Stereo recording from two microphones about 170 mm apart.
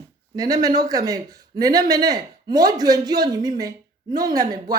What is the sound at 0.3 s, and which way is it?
Speech, 20° right (ahead or behind).